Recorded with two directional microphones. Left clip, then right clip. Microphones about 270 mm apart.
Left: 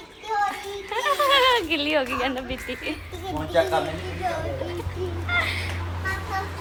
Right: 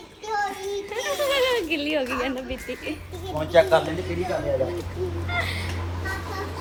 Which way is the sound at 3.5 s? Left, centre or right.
Right.